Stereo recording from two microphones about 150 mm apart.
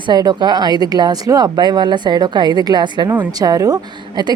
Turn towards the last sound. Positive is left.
turn(degrees=-30)  # may be behind; listen again after turning